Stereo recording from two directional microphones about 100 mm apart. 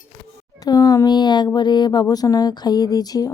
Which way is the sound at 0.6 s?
40° left (ahead or behind).